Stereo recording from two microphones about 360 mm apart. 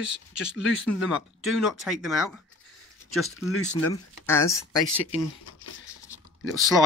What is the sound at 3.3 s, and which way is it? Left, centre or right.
Speech, left.